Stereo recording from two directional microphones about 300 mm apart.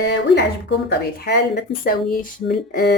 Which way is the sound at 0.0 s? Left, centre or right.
Left.